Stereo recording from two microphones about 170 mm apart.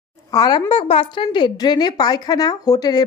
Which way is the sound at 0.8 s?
35° left (ahead or behind).